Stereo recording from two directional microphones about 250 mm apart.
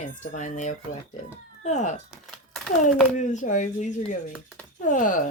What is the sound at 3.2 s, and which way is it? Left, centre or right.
Speech, left.